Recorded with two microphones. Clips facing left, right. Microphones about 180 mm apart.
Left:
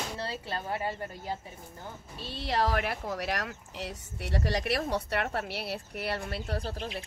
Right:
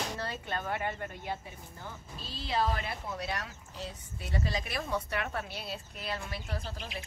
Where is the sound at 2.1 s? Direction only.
65° left (ahead or behind).